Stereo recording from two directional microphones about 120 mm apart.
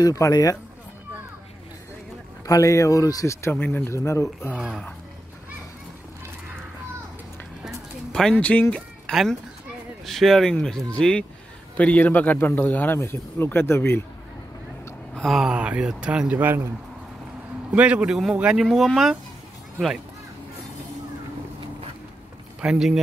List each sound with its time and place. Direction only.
0.0 s speech: 30° left (ahead or behind)
2.4 s speech: 25° left (ahead or behind)
4.6 s a man's voice: centre (ahead or behind)
8.1 s a man's voice: 5° left (ahead or behind)
15.1 s speech: centre (ahead or behind); by 16.6 s 15° right (ahead or behind)
17.7 s a man's voice: 10° right (ahead or behind)
22.6 s a man's voice: 5° right (ahead or behind)